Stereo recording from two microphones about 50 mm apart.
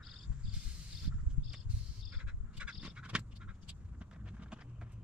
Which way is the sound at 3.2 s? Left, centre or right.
Right.